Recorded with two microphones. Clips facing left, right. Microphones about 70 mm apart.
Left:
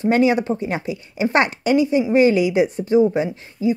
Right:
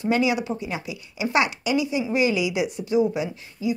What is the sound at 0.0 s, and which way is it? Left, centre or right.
Speech, left.